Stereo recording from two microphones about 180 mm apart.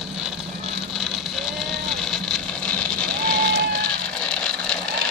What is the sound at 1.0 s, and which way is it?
Vehicle, centre (ahead or behind).